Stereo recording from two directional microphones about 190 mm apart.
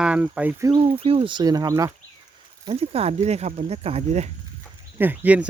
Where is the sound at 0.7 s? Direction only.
30° right (ahead or behind).